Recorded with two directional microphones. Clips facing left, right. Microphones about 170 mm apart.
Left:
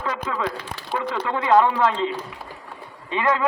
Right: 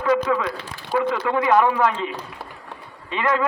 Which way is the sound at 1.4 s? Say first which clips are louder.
Left 1 dB; 25° left (ahead or behind).